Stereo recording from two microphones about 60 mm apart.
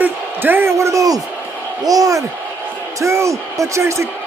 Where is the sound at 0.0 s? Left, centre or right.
Right.